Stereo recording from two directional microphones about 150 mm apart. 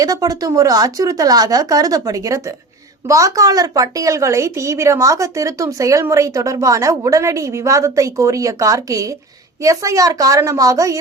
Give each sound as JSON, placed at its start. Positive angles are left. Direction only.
{"t": 0.0, "sound": "a woman's voice", "side_deg": -25}